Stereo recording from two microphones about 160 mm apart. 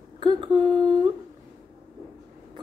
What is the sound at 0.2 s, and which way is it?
Speech, 30° right (ahead or behind).